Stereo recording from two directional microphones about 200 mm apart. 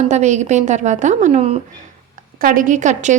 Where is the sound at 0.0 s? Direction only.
35° right (ahead or behind).